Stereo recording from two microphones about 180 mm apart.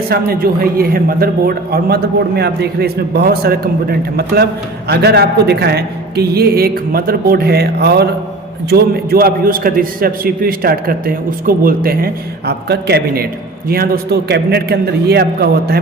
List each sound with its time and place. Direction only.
0.1 s a man's voice: 55° right (ahead or behind)